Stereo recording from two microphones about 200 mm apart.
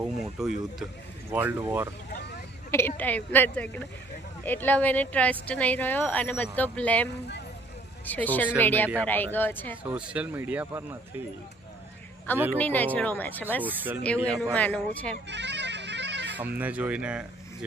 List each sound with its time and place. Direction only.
0.3 s speech: centre (ahead or behind)
2.7 s speech: 10° left (ahead or behind)
9.8 s speech: 5° right (ahead or behind)
12.5 s speech: 10° left (ahead or behind)
13.6 s speech: 10° right (ahead or behind)
14.5 s speech: 5° left (ahead or behind)
15.3 s bagpipes: 60° right (ahead or behind)
16.6 s speech: 5° right (ahead or behind)